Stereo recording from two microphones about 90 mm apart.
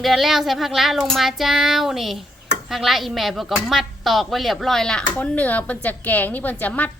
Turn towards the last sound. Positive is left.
turn(degrees=20)  # may be behind; listen again after turning